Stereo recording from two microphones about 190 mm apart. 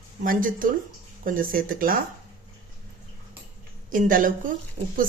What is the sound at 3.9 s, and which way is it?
Speech, 45° right (ahead or behind).